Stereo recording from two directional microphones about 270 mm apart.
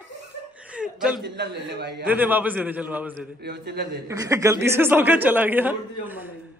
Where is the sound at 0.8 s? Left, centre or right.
Centre.